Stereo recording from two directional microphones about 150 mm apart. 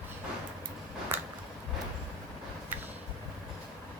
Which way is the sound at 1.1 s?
15° right (ahead or behind).